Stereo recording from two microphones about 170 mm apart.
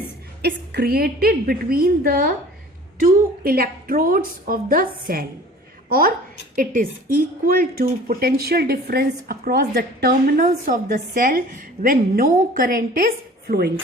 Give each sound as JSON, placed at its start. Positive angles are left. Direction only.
{"t": 0.4, "sound": "a woman's voice", "side_deg": -65}
{"t": 13.5, "sound": "speech", "side_deg": -70}